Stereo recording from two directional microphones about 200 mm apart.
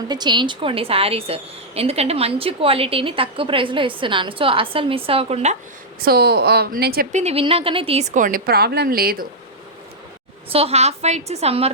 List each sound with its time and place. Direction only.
0.1 s a woman's voice: 20° right (ahead or behind)
6.0 s a woman's voice: 50° right (ahead or behind)
10.5 s a woman's voice: 30° right (ahead or behind)